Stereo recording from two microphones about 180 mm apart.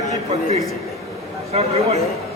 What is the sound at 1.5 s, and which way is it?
Speech, 35° right (ahead or behind).